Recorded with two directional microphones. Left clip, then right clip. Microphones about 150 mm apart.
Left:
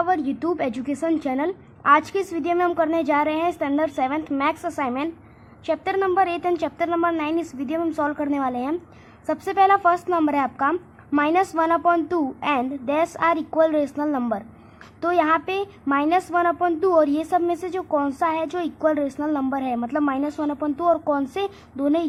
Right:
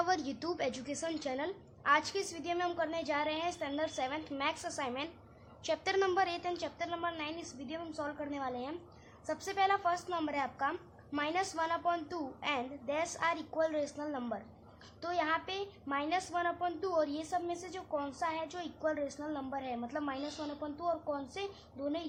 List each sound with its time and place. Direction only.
0.0 s a woman's voice: 30° left (ahead or behind); by 19.2 s 45° left (ahead or behind)
19.2 s speech: 35° left (ahead or behind)
20.8 s a woman's voice: 45° left (ahead or behind)